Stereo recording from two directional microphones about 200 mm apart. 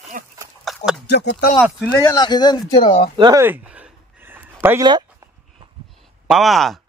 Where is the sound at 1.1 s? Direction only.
55° left (ahead or behind).